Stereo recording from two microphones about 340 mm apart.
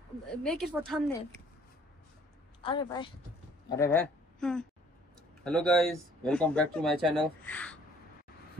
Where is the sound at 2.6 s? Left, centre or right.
Centre.